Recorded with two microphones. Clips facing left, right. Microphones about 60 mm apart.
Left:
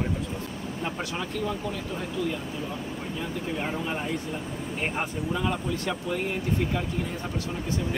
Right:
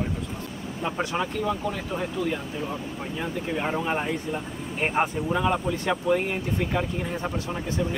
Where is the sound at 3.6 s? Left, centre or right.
Right.